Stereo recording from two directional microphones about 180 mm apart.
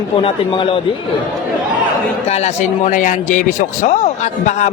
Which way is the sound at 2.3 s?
40° left (ahead or behind).